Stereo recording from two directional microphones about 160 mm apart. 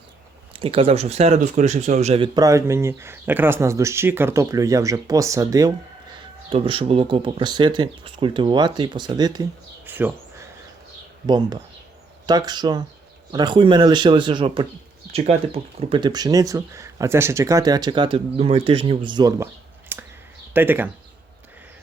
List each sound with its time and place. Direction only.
0.5 s speech: 35° right (ahead or behind)
6.5 s speech: 35° right (ahead or behind)
9.8 s bird: 10° right (ahead or behind)
11.3 s speech: 25° right (ahead or behind)
19.9 s clicking: 15° right (ahead or behind)
20.5 s speech: 10° right (ahead or behind)